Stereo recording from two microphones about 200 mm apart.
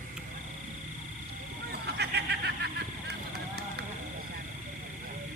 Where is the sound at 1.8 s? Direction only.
55° right (ahead or behind).